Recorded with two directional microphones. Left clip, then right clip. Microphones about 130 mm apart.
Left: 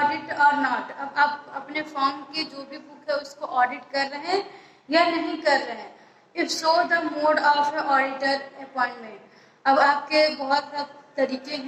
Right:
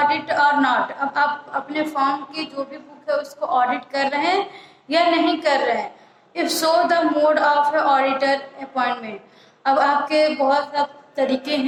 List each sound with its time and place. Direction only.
0.0 s a woman's voice: 35° right (ahead or behind)